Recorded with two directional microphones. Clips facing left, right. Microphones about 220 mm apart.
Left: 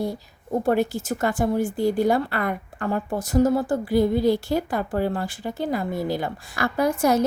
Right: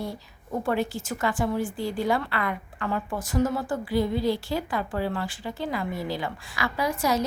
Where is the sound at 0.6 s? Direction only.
40° left (ahead or behind).